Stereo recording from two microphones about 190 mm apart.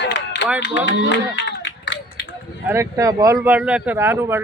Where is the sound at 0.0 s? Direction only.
65° left (ahead or behind).